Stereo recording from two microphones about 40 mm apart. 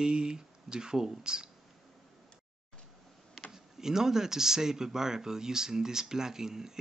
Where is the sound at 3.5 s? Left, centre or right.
Centre.